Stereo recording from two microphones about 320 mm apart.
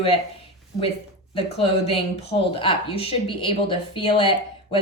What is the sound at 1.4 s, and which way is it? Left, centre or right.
Speech, centre.